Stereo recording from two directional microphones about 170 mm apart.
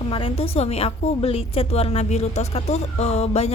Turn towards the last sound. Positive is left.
turn(degrees=40)  # may be behind; listen again after turning